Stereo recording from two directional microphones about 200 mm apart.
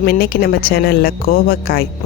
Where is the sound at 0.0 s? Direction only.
50° left (ahead or behind).